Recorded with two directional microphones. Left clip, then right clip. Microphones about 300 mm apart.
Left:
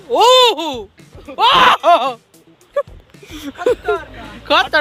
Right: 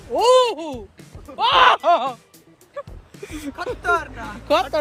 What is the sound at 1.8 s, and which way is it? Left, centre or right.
Speech, centre.